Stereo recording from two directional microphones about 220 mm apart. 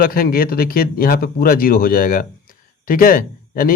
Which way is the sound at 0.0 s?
40° left (ahead or behind).